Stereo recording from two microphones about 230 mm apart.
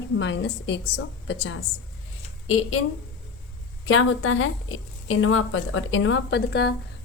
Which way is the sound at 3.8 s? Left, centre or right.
Left.